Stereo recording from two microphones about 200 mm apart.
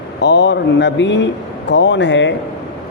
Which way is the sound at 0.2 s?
60° left (ahead or behind).